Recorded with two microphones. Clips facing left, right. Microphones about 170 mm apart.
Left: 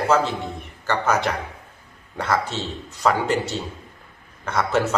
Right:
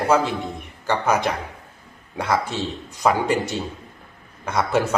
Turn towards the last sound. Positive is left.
turn(degrees=-10)  # may be behind; listen again after turning